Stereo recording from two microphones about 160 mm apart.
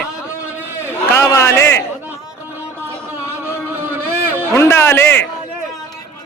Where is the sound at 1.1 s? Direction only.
15° left (ahead or behind).